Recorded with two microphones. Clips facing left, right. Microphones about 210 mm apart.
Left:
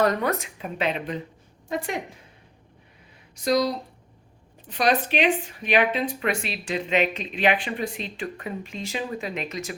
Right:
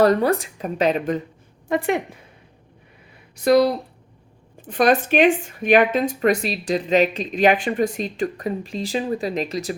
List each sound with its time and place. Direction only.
0.0 s speech: 35° right (ahead or behind)
3.3 s speech: 60° right (ahead or behind); by 9.7 s 35° right (ahead or behind)